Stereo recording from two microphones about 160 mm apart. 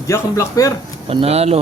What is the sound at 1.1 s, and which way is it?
Speech, 40° right (ahead or behind).